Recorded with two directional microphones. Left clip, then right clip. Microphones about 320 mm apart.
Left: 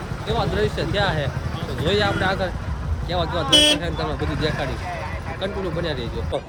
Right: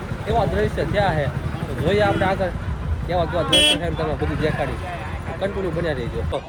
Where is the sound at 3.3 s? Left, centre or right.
Left.